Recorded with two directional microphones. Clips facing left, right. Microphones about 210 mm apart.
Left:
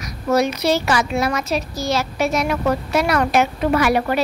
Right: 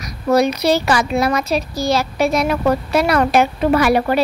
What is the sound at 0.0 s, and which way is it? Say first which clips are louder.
A woman's voice: right 3 dB; 35° right (ahead or behind).